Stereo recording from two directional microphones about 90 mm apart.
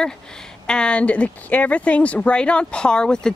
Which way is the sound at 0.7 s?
10° left (ahead or behind).